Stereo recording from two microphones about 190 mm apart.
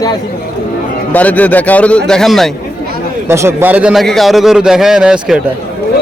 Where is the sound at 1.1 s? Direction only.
10° left (ahead or behind).